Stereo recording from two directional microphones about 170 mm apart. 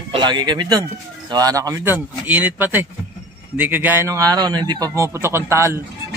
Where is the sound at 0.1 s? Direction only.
25° right (ahead or behind).